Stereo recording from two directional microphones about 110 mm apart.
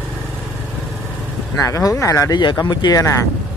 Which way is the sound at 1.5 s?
30° left (ahead or behind).